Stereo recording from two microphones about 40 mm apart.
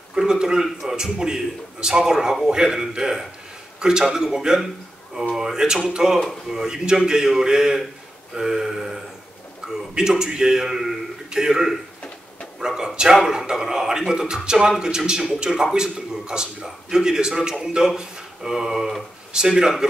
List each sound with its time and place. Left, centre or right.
0.2 s speech: centre
9.6 s a sound: centre
9.9 s a man's voice: centre